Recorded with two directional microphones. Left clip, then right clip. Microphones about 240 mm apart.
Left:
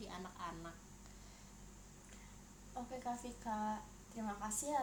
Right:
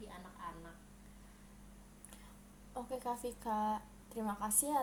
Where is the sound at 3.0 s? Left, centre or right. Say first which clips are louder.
Right 4 dB; right.